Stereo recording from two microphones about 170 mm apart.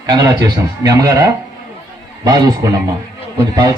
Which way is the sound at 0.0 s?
20° right (ahead or behind).